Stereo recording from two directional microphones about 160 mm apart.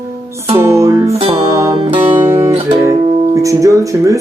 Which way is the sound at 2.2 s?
15° right (ahead or behind).